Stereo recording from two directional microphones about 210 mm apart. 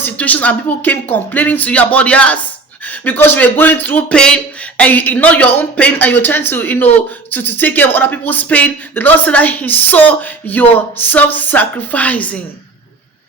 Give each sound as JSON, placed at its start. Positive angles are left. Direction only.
{"t": 0.0, "sound": "speech", "side_deg": 5}